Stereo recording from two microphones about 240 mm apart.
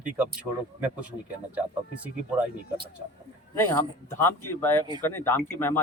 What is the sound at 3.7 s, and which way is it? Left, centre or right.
A man's voice, centre.